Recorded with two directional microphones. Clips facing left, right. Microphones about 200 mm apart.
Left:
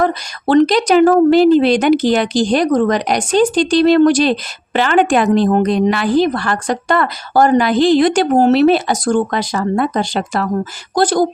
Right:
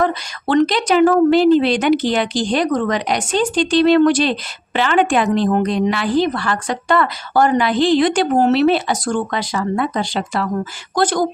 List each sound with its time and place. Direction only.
0.0 s speech: 40° left (ahead or behind)
10.9 s speech: 35° left (ahead or behind)